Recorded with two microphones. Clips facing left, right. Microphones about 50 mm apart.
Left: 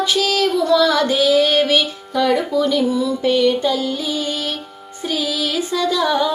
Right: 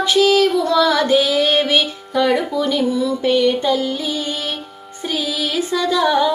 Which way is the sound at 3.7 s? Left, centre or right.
Right.